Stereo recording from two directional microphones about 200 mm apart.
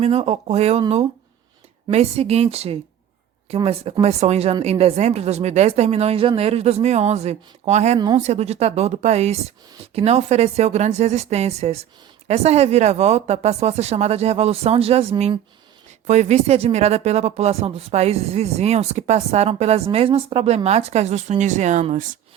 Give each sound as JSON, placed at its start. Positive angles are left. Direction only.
{"t": 0.0, "sound": "speech", "side_deg": -30}
{"t": 7.9, "sound": "speech", "side_deg": -20}
{"t": 8.2, "sound": "speech", "side_deg": -35}